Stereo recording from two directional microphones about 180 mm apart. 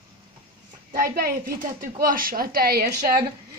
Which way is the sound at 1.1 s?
55° right (ahead or behind).